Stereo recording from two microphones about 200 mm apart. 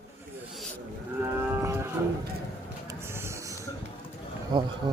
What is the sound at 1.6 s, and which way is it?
Cattle, 15° right (ahead or behind).